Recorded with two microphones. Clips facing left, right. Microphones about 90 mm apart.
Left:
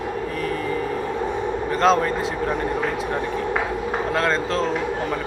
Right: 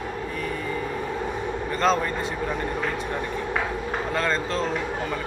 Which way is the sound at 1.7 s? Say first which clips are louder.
Left 4 dB; centre (ahead or behind).